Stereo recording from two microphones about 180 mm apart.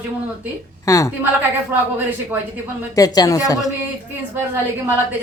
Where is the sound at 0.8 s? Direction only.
15° left (ahead or behind).